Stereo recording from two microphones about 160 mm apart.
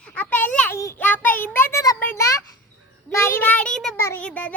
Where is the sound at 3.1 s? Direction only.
15° left (ahead or behind).